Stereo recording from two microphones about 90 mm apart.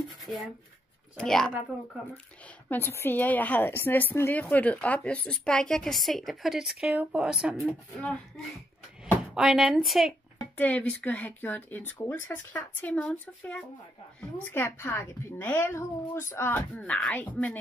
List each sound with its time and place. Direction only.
1.1 s a woman's voice: 5° left (ahead or behind)
2.7 s a woman's voice: 25° left (ahead or behind); by 7.5 s 10° right (ahead or behind)
7.6 s a woman's voice: 15° left (ahead or behind)
9.0 s speech: 5° right (ahead or behind)
10.6 s a woman's voice: 15° left (ahead or behind)
14.5 s speech: 25° left (ahead or behind)